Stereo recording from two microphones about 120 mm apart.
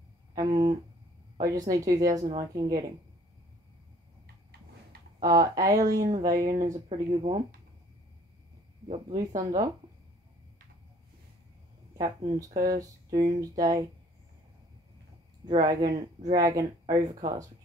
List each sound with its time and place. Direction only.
0.3 s a sound: 35° right (ahead or behind)
1.5 s speech: 30° right (ahead or behind)
5.2 s speech: 30° right (ahead or behind)
6.9 s speech: 55° right (ahead or behind)
9.1 s speech: 30° right (ahead or behind)
12.0 s speech: 30° right (ahead or behind)
15.4 s speech: 35° right (ahead or behind)